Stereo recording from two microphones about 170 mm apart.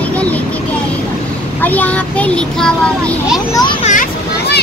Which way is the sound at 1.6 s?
10° left (ahead or behind).